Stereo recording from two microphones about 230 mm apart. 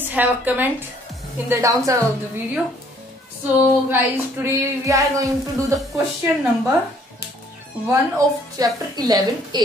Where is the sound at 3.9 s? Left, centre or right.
Centre.